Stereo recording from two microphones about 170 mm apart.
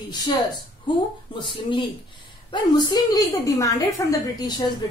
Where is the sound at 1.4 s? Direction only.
30° left (ahead or behind).